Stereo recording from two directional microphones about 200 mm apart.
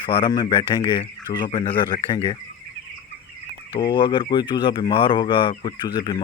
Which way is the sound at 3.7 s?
25° left (ahead or behind).